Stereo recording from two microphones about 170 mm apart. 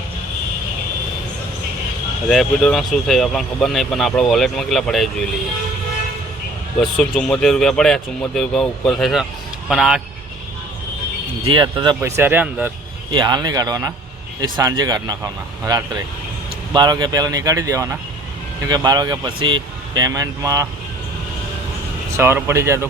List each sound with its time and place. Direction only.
2.3 s speech: centre (ahead or behind)
6.7 s speech: 5° left (ahead or behind)
11.4 s speech: 30° right (ahead or behind)
11.9 s speech: 15° right (ahead or behind)
13.1 s speech: 25° right (ahead or behind)
22.2 s speech: 15° right (ahead or behind)